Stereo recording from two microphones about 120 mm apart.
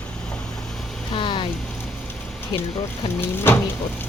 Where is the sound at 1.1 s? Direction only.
40° left (ahead or behind).